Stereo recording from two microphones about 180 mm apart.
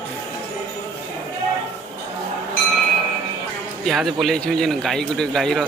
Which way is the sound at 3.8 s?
Centre (ahead or behind).